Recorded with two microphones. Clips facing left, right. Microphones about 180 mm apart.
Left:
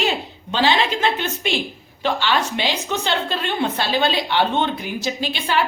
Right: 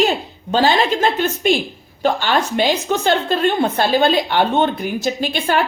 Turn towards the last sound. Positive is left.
turn(degrees=-50)  # may be behind; listen again after turning